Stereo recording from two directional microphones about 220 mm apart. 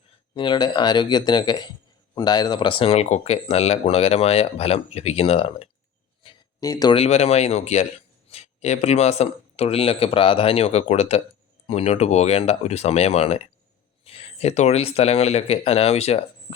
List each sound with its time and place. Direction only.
0.3 s speech: 20° left (ahead or behind)